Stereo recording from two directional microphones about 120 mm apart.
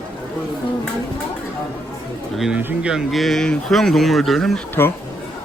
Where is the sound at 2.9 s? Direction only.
Centre (ahead or behind).